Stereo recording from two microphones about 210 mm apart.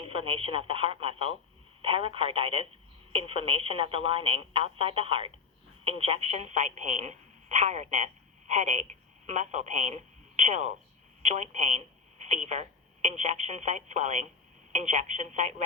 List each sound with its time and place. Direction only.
0.0 s a woman's voice: 25° right (ahead or behind)